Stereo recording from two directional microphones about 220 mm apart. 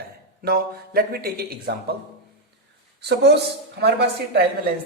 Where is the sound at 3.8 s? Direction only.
50° right (ahead or behind).